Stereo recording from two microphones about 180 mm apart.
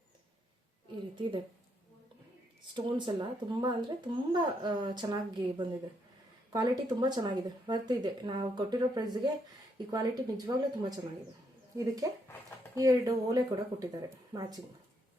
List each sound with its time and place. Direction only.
1.1 s speech: 25° right (ahead or behind)
2.7 s speech: 25° right (ahead or behind)